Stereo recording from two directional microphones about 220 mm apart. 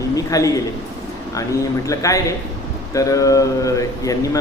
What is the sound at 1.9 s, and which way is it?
A man's voice, 15° left (ahead or behind).